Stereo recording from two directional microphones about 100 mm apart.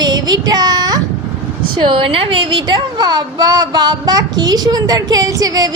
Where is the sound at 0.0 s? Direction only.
45° right (ahead or behind).